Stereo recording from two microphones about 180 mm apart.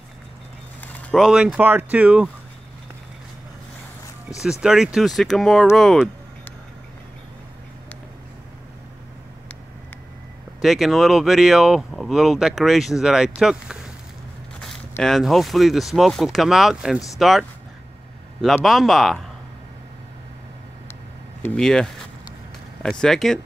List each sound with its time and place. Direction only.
0.7 s a sound: 10° left (ahead or behind)
1.2 s speech: 5° right (ahead or behind)
4.4 s speech: 5° right (ahead or behind)
10.6 s speech: centre (ahead or behind)
21.4 s speech: 5° left (ahead or behind)